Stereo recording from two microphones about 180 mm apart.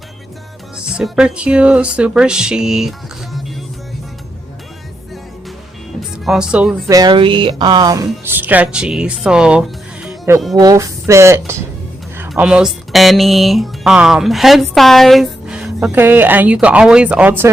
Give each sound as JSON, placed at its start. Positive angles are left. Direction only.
{"t": 0.9, "sound": "music", "side_deg": -5}
{"t": 6.2, "sound": "music", "side_deg": -5}
{"t": 6.8, "sound": "speech", "side_deg": -20}
{"t": 10.6, "sound": "speech", "side_deg": -20}
{"t": 12.3, "sound": "music", "side_deg": -5}